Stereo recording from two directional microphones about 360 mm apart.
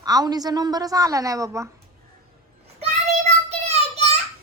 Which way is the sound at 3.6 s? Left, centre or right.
Centre.